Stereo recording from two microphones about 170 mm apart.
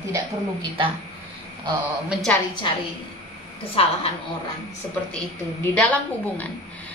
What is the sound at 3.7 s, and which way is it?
Speech, 35° left (ahead or behind).